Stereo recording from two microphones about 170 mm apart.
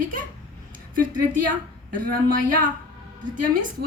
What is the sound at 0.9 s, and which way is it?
A woman's voice, 55° right (ahead or behind).